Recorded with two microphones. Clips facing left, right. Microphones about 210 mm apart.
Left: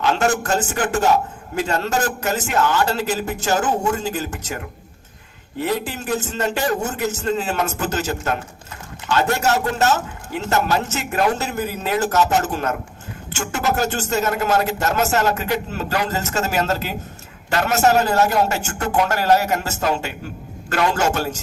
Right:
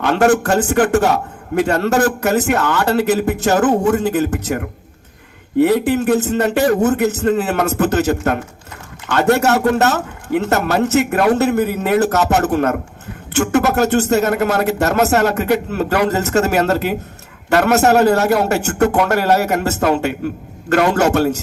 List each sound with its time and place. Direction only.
0.0 s a man's voice: 55° right (ahead or behind)